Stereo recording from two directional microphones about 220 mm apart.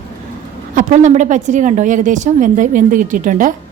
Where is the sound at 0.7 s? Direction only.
35° right (ahead or behind).